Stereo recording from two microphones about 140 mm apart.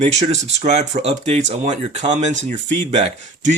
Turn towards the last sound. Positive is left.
turn(degrees=-55)  # may be behind; listen again after turning